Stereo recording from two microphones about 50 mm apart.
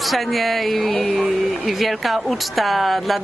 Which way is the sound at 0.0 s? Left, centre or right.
Centre.